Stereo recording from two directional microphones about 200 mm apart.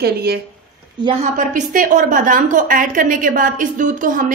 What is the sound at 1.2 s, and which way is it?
A woman's voice, 40° right (ahead or behind).